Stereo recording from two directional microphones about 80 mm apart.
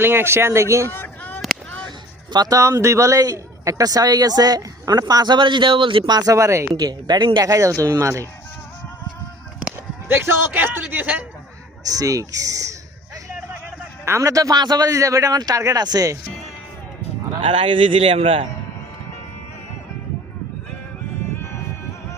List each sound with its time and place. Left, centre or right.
0.0 s speech: right
0.9 s a sound: left
2.3 s speech: right
2.6 s speech: right
6.3 s speech: right
6.7 s speech: right
10.1 s a man's voice: right
11.9 s speech: right
14.0 s speech: right
17.5 s speech: right